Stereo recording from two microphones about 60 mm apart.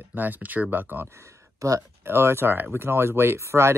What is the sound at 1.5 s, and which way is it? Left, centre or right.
Speech, right.